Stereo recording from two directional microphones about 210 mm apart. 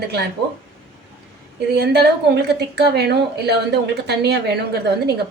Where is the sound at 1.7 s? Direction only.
50° right (ahead or behind).